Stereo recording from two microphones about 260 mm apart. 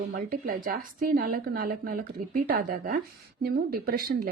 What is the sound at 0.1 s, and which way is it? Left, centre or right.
A woman's voice, right.